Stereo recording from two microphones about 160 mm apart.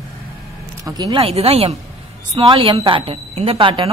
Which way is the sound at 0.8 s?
25° right (ahead or behind).